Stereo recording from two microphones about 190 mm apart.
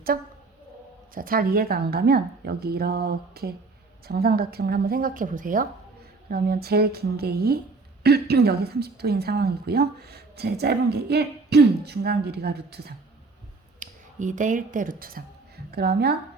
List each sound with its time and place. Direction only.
1.1 s a woman's voice: 50° right (ahead or behind)
6.3 s a woman's voice: 55° right (ahead or behind)
13.7 s speech: 40° right (ahead or behind); by 16.1 s 55° right (ahead or behind)